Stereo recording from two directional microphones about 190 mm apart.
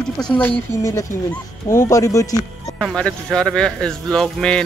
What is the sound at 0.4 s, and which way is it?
Speech, 15° left (ahead or behind).